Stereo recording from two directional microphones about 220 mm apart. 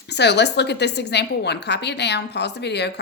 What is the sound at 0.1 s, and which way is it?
Speech, 50° left (ahead or behind).